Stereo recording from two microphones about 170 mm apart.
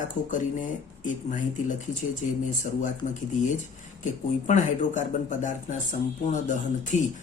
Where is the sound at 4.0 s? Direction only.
45° left (ahead or behind).